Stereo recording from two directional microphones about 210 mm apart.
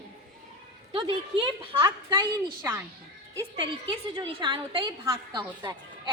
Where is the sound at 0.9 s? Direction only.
25° right (ahead or behind).